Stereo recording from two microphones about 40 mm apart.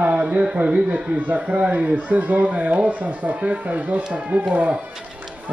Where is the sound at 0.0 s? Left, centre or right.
Right.